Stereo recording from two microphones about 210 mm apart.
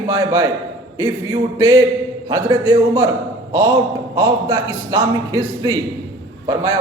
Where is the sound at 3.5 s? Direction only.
15° right (ahead or behind).